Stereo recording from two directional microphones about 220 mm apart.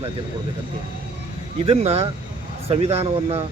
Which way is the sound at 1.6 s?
25° right (ahead or behind).